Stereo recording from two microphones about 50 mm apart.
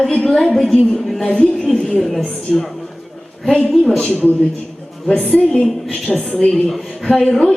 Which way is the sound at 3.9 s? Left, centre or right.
Left.